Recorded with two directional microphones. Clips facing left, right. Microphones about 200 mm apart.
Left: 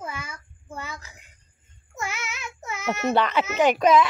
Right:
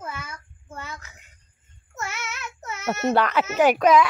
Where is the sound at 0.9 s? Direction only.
35° left (ahead or behind).